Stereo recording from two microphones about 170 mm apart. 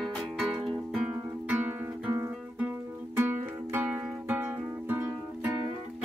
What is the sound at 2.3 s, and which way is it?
Music, 10° right (ahead or behind).